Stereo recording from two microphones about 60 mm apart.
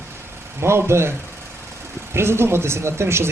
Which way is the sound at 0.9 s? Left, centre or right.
Right.